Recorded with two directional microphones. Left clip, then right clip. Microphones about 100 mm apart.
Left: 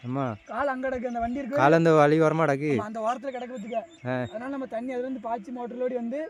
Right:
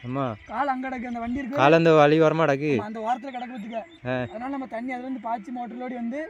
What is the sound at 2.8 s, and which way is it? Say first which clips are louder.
Speech: right 1 dB; centre (ahead or behind).